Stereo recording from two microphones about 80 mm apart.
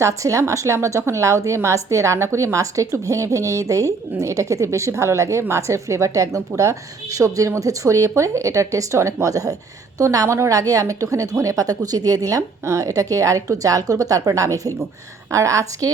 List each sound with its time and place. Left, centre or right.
0.0 s a woman's voice: right